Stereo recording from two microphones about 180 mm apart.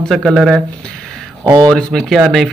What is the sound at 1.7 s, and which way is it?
Speech, centre (ahead or behind).